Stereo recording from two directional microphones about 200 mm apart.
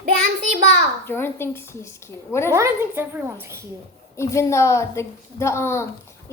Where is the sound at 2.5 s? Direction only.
15° right (ahead or behind).